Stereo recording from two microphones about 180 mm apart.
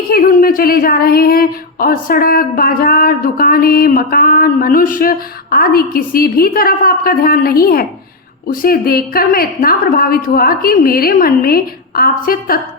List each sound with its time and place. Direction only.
0.1 s speech: 50° left (ahead or behind)